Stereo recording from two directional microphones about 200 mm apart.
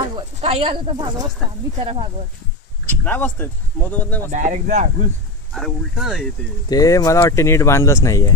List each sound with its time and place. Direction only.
0.1 s speech: 30° right (ahead or behind)
2.9 s speech: 10° left (ahead or behind)
4.3 s speech: 35° right (ahead or behind)
5.5 s speech: centre (ahead or behind)
6.7 s speech: 20° left (ahead or behind)